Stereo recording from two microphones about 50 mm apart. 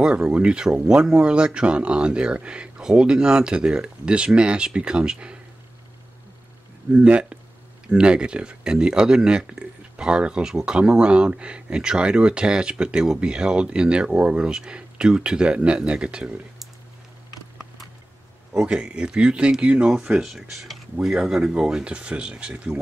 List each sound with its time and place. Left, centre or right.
0.0 s speech: centre
6.9 s speech: right
18.7 s speech: centre
19.9 s speech: centre